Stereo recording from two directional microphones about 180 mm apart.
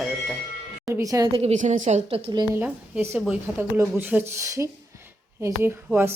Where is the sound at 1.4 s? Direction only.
40° right (ahead or behind).